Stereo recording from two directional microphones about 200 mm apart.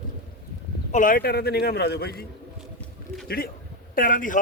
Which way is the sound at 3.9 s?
45° left (ahead or behind).